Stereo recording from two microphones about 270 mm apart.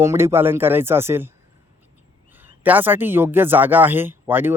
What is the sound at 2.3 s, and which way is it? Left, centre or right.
Speech, centre.